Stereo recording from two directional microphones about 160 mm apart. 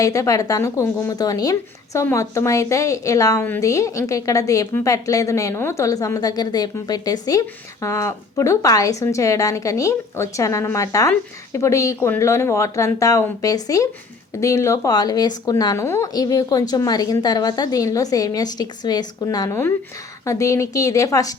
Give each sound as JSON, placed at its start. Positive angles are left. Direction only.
{"t": 0.0, "sound": "a woman's voice", "side_deg": 20}